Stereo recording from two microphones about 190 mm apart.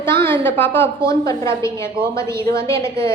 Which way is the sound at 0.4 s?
10° left (ahead or behind).